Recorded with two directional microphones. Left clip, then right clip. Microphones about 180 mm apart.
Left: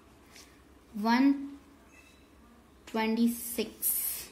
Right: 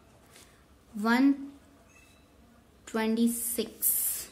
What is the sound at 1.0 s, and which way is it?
Speech, 25° right (ahead or behind).